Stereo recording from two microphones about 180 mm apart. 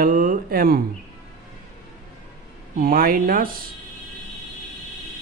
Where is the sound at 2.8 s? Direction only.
55° right (ahead or behind).